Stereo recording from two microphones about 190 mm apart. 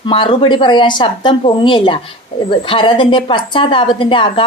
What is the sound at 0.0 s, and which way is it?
A woman's voice, 25° left (ahead or behind).